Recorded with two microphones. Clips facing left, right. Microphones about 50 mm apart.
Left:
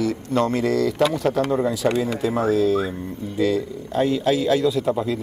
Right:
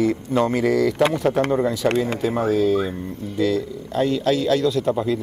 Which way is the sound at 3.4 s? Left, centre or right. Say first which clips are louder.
Even; centre.